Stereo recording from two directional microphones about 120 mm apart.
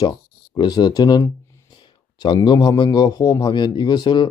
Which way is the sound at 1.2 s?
25° left (ahead or behind).